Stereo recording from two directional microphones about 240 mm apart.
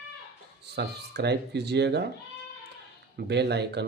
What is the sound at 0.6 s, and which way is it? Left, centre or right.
Speech, right.